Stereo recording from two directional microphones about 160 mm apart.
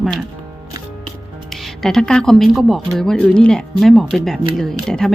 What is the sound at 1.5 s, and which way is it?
Speech, centre (ahead or behind).